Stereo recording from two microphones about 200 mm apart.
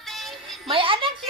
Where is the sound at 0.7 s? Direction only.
25° right (ahead or behind).